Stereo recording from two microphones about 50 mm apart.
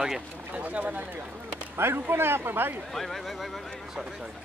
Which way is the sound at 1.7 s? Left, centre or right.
Right.